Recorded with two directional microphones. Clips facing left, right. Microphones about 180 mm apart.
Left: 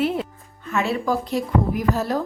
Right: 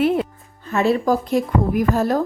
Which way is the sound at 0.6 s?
35° right (ahead or behind).